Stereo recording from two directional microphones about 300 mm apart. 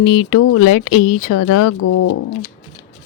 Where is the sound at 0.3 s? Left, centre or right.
Left.